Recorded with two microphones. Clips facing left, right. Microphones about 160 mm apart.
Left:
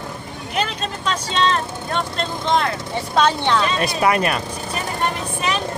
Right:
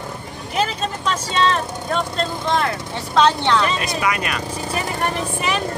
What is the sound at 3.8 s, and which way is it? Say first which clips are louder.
Speech: left 4 dB; 35° left (ahead or behind).